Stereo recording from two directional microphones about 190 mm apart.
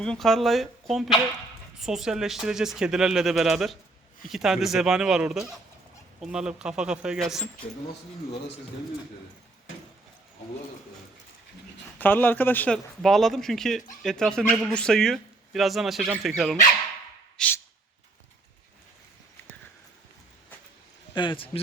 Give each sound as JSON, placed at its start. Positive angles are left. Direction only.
{"t": 0.0, "sound": "speech", "side_deg": 0}
{"t": 11.9, "sound": "speech", "side_deg": 10}
{"t": 17.3, "sound": "a sound", "side_deg": 5}
{"t": 21.2, "sound": "a man's voice", "side_deg": 25}